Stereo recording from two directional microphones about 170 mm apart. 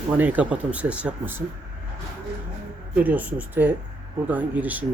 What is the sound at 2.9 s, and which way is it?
Speech, 10° right (ahead or behind).